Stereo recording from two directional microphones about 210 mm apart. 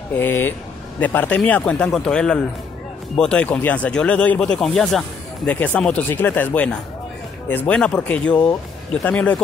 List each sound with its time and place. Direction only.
0.2 s speech: 10° left (ahead or behind)